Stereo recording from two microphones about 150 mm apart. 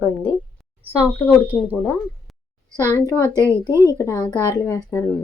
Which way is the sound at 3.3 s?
20° right (ahead or behind).